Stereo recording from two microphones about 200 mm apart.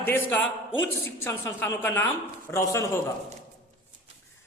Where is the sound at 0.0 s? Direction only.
10° left (ahead or behind).